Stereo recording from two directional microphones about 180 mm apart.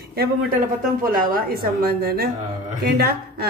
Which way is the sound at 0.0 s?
60° right (ahead or behind).